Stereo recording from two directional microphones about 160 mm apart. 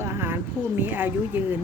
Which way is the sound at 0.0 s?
15° right (ahead or behind).